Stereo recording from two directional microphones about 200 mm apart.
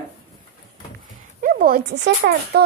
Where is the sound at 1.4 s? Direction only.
45° right (ahead or behind).